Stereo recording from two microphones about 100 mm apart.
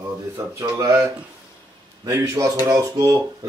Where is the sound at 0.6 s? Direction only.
30° right (ahead or behind).